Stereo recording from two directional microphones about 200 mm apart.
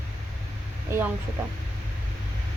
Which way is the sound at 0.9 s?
15° right (ahead or behind).